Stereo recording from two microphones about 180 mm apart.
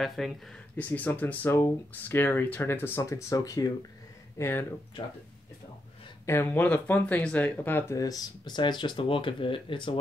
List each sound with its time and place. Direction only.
0.0 s speech: centre (ahead or behind)
6.2 s speech: 10° left (ahead or behind); by 9.9 s 30° left (ahead or behind)